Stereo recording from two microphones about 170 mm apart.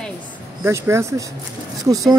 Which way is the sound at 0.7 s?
15° right (ahead or behind).